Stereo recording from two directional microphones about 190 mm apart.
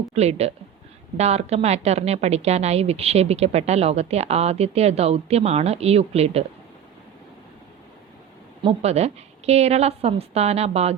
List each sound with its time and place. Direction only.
0.1 s a woman's voice: 35° right (ahead or behind)
8.6 s a woman's voice: 35° right (ahead or behind)